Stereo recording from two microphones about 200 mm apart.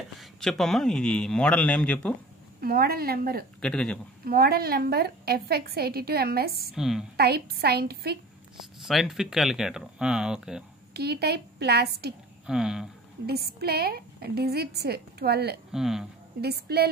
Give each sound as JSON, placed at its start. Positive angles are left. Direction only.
{"t": 0.2, "sound": "a man's voice", "side_deg": 0}
{"t": 2.6, "sound": "a woman's voice", "side_deg": -50}
{"t": 3.6, "sound": "a man's voice", "side_deg": 5}
{"t": 4.2, "sound": "a woman's voice", "side_deg": -50}
{"t": 6.7, "sound": "a man's voice", "side_deg": 0}
{"t": 7.2, "sound": "a woman's voice", "side_deg": -55}
{"t": 8.8, "sound": "a man's voice", "side_deg": 0}
{"t": 10.9, "sound": "a woman's voice", "side_deg": -55}
{"t": 12.4, "sound": "a man's voice", "side_deg": -5}
{"t": 13.3, "sound": "a woman's voice", "side_deg": -50}
{"t": 15.7, "sound": "a man's voice", "side_deg": 0}
{"t": 16.3, "sound": "a woman's voice", "side_deg": -55}